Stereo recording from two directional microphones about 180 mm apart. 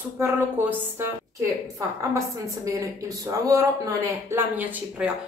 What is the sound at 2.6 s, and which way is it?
A woman's voice, 20° right (ahead or behind).